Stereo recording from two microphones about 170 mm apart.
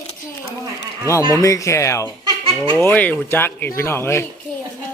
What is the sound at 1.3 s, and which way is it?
A man's voice, 20° left (ahead or behind).